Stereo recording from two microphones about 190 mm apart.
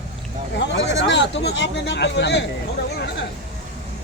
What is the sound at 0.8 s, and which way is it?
Speech, 70° left (ahead or behind).